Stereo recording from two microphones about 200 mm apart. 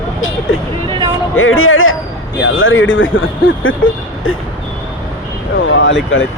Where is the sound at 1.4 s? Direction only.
90° left.